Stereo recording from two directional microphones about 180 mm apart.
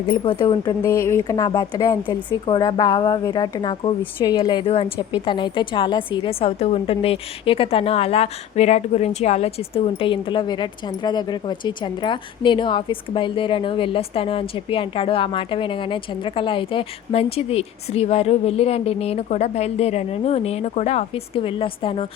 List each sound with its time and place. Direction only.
0.1 s a woman's voice: 25° left (ahead or behind)